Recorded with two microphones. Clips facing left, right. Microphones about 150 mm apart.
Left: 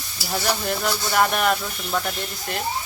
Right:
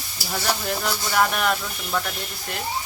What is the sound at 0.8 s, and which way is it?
Speech, 5° left (ahead or behind).